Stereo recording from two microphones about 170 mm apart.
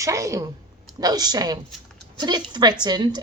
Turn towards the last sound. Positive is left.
turn(degrees=-25)  # may be behind; listen again after turning